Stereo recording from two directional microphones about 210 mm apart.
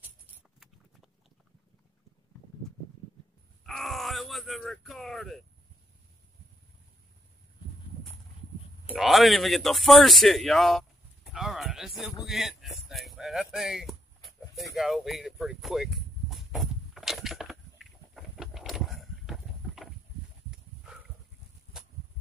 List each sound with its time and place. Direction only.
3.6 s speech: centre (ahead or behind)
8.9 s speech: centre (ahead or behind)
12.3 s a sound: centre (ahead or behind)